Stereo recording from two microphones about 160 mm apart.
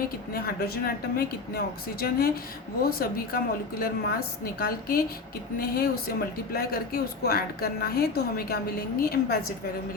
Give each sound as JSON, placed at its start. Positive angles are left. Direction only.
{"t": 0.3, "sound": "speech", "side_deg": 70}